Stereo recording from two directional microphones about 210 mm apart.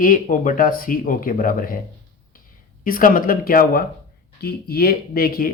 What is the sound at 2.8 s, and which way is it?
Speech, 40° left (ahead or behind).